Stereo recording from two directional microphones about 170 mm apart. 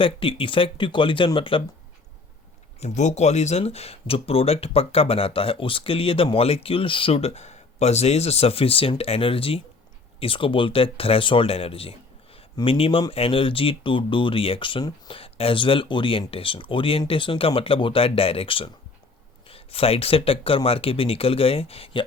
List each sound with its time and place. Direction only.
0.0 s speech: 30° left (ahead or behind)
2.8 s speech: 45° left (ahead or behind)